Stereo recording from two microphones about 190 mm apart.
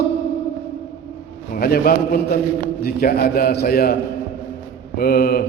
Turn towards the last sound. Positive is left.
turn(degrees=50)  # may be behind; listen again after turning